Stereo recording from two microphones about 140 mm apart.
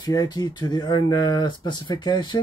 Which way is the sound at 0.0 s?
30° left (ahead or behind).